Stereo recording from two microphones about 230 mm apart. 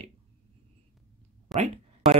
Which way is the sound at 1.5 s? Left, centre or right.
Centre.